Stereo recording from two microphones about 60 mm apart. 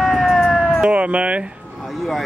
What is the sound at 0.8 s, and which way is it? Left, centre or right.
Speech, right.